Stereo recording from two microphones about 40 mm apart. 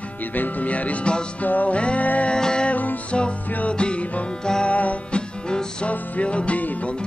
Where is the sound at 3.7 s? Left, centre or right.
Left.